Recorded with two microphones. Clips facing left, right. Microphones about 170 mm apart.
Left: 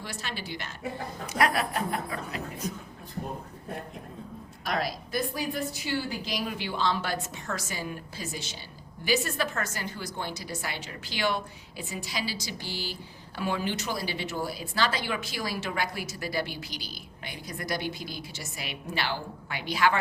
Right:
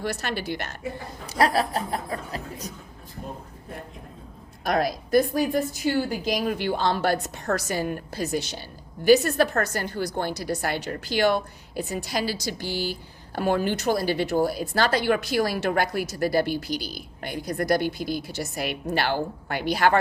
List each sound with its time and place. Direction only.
0.0 s a woman's voice: 65° right (ahead or behind)
1.3 s speech: 35° right (ahead or behind)
4.6 s a woman's voice: 50° right (ahead or behind)
10.2 s a woman's voice: 55° right (ahead or behind)
10.8 s a woman's voice: 50° right (ahead or behind)
17.2 s a woman's voice: 55° right (ahead or behind)